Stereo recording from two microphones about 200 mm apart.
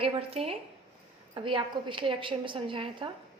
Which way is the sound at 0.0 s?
30° right (ahead or behind).